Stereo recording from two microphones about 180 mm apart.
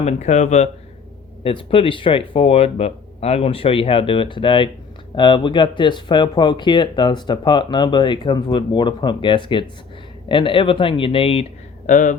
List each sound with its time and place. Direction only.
0.0 s speech: 40° left (ahead or behind)
1.5 s speech: 30° left (ahead or behind)
11.9 s speech: 45° left (ahead or behind)